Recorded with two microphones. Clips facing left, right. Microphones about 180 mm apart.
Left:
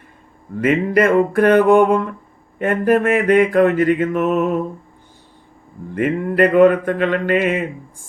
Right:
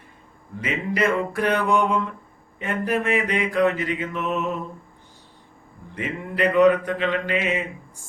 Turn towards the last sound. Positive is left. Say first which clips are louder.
# left 7 dB
turn(degrees=55)  # may be behind; listen again after turning